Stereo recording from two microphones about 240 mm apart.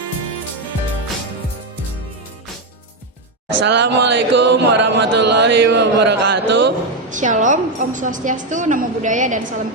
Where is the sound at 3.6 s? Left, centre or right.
Right.